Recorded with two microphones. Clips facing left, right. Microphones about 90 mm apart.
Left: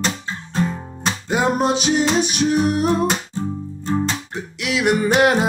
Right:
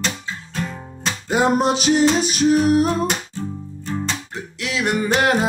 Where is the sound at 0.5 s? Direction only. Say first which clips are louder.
Left 7 dB; 20° left (ahead or behind).